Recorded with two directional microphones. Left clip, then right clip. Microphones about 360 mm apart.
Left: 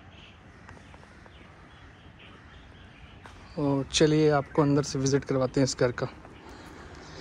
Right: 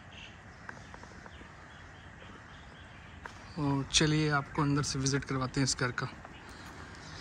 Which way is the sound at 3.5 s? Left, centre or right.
Centre.